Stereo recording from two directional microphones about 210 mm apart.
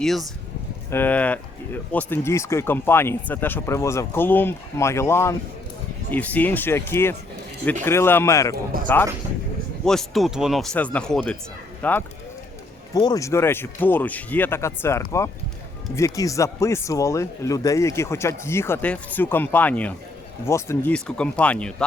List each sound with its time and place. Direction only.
0.0 s speech: centre (ahead or behind)
8.7 s speech: 45° right (ahead or behind)
9.8 s speech: centre (ahead or behind)
12.9 s speech: 20° left (ahead or behind)